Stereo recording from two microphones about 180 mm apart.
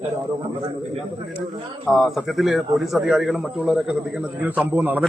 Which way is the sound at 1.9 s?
Centre (ahead or behind).